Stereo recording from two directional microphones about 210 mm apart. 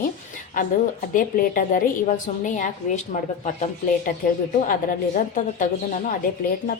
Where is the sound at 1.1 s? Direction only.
40° left (ahead or behind).